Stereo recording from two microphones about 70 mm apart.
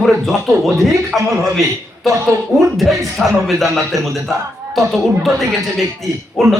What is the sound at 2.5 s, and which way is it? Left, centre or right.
Speech, right.